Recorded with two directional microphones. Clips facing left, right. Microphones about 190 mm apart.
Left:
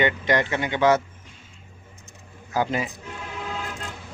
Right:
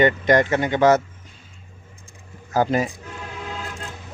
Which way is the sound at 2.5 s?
40° right (ahead or behind).